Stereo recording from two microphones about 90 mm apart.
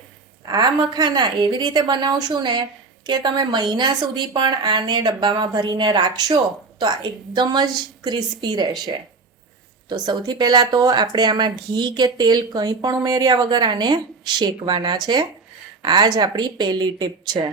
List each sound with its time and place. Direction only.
0.4 s a woman's voice: 50° right (ahead or behind)
9.9 s speech: 55° right (ahead or behind)